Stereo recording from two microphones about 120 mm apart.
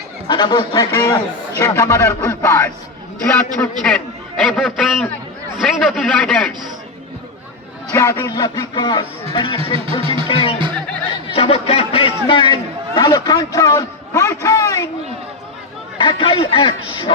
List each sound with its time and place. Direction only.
0.3 s a man's voice: 35° left (ahead or behind); by 2.6 s 20° left (ahead or behind)
3.3 s a man's voice: 10° left (ahead or behind)
7.9 s a man's voice: 25° left (ahead or behind); by 9.6 s 45° left (ahead or behind)
9.7 s speech: 50° right (ahead or behind)
10.2 s a man's voice: 45° left (ahead or behind); by 14.8 s 25° left (ahead or behind)
16.0 s a man's voice: 45° left (ahead or behind)